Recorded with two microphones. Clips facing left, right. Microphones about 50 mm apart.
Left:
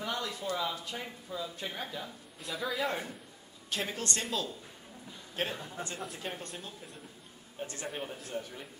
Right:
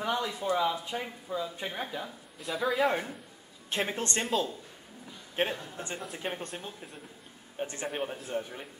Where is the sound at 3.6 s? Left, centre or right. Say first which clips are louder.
Right 4 dB; right.